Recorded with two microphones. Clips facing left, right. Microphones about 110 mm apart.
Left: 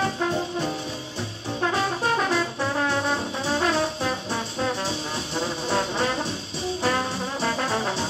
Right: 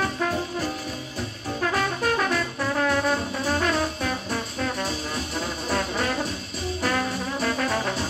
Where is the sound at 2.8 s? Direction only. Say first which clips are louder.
Right 1 dB; 30° left (ahead or behind).